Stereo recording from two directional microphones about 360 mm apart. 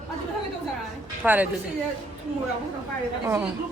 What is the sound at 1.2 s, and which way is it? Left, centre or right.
Speech, centre.